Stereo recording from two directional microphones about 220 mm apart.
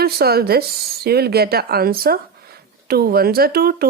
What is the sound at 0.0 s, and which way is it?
A woman's voice, 45° right (ahead or behind).